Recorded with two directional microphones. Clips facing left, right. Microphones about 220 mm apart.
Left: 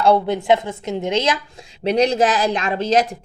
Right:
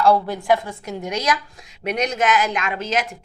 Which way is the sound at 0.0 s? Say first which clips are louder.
Left 2 dB; 20° left (ahead or behind).